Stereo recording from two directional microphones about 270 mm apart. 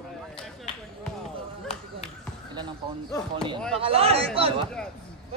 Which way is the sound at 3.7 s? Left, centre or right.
Right.